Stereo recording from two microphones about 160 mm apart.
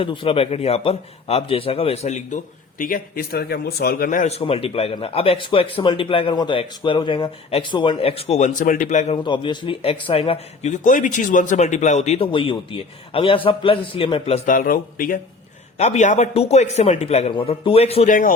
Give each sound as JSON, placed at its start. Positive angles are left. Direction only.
{"t": 0.0, "sound": "a man's voice", "side_deg": 35}
{"t": 9.1, "sound": "a man's voice", "side_deg": 30}
{"t": 14.4, "sound": "speech", "side_deg": 60}
{"t": 15.8, "sound": "a man's voice", "side_deg": 45}
{"t": 18.1, "sound": "speech", "side_deg": 60}